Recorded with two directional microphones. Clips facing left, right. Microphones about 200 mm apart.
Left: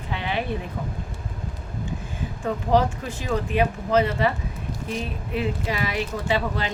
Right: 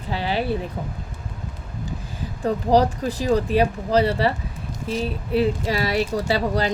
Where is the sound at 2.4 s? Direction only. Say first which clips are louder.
Right 3 dB; 35° right (ahead or behind).